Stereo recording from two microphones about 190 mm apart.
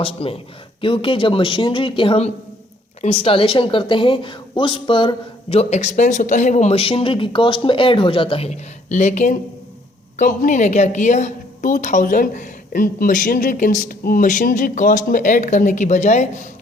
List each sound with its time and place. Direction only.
0.0 s a woman's voice: 30° left (ahead or behind)